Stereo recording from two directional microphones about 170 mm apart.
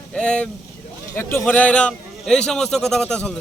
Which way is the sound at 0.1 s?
5° left (ahead or behind).